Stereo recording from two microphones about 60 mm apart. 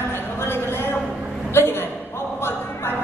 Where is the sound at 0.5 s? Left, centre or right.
Left.